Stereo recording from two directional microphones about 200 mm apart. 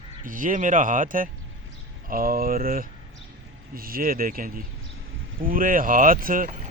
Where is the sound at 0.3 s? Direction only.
40° right (ahead or behind).